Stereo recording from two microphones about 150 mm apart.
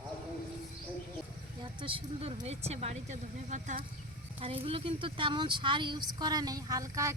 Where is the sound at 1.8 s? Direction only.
40° right (ahead or behind); by 3.8 s 55° right (ahead or behind).